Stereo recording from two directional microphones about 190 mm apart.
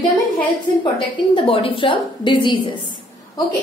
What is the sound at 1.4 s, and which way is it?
A woman's voice, 25° left (ahead or behind).